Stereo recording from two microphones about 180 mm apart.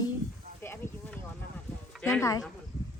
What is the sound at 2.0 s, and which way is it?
Speech, 5° left (ahead or behind).